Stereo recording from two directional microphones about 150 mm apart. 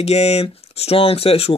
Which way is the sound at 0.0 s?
45° left (ahead or behind).